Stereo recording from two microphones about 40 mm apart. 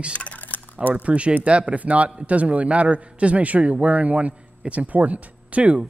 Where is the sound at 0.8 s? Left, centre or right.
Right.